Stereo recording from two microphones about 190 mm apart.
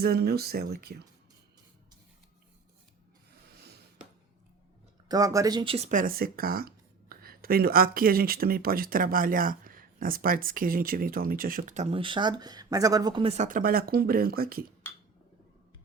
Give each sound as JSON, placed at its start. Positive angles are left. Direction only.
{"t": 0.0, "sound": "speech", "side_deg": -55}
{"t": 3.5, "sound": "a sound", "side_deg": -55}
{"t": 5.0, "sound": "speech", "side_deg": -20}